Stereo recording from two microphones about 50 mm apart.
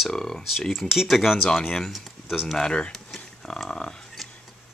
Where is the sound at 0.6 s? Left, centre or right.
Centre.